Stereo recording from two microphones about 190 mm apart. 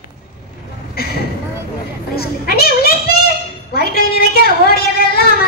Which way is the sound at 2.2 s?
55° left (ahead or behind).